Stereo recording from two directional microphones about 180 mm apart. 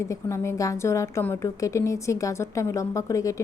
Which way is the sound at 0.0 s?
15° left (ahead or behind).